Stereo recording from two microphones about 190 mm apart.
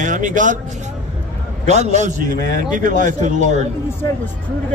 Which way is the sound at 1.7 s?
35° right (ahead or behind).